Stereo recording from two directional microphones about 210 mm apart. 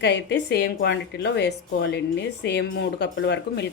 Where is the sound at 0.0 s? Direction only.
55° left (ahead or behind).